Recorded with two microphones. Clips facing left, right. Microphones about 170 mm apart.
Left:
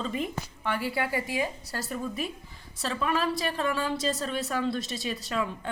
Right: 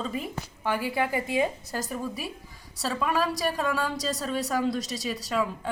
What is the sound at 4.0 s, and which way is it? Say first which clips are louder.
A woman's voice: even; 40° right (ahead or behind).